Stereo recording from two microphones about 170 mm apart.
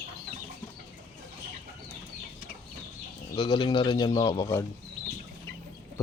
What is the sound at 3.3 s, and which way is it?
Speech, 25° left (ahead or behind).